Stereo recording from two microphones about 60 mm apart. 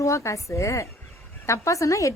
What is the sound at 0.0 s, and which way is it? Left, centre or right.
Speech, left.